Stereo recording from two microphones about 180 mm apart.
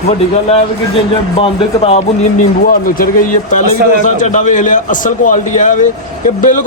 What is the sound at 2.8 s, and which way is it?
A man's voice, 50° left (ahead or behind).